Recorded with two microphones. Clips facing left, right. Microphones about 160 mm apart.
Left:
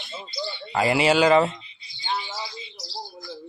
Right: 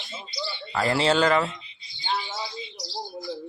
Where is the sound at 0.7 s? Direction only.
15° left (ahead or behind).